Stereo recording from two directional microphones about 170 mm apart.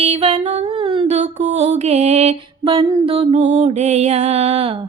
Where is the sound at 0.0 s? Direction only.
40° right (ahead or behind).